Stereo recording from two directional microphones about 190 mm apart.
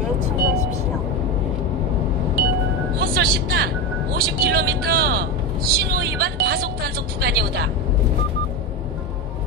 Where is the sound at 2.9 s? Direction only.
55° right (ahead or behind).